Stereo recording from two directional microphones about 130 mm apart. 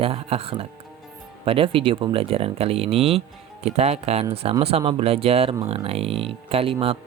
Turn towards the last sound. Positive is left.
turn(degrees=-45)  # may be behind; listen again after turning